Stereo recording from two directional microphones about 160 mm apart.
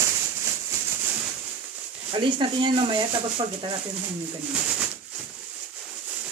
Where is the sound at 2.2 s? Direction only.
30° right (ahead or behind).